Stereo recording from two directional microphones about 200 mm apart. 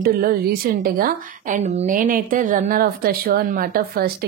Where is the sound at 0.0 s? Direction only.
45° right (ahead or behind).